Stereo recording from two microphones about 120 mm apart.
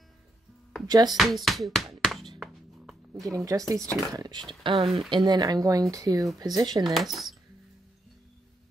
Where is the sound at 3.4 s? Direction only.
25° right (ahead or behind).